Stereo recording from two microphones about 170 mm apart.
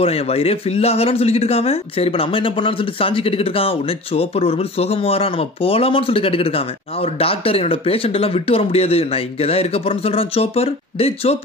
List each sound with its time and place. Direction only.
0.0 s speech: 35° left (ahead or behind)